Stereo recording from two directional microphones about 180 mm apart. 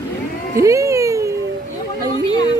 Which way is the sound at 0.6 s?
15° right (ahead or behind).